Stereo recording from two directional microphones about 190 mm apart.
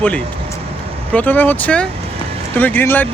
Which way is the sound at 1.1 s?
10° left (ahead or behind).